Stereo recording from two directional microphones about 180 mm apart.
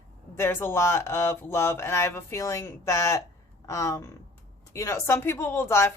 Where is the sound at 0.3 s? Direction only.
15° left (ahead or behind).